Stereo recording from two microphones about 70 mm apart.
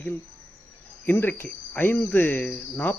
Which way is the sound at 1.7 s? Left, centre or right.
Left.